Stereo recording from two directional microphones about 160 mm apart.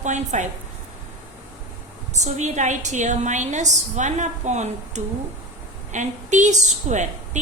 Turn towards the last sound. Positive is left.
turn(degrees=-50)  # may be behind; listen again after turning